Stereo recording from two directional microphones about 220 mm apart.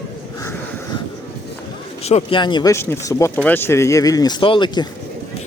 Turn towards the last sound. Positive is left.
turn(degrees=20)  # may be behind; listen again after turning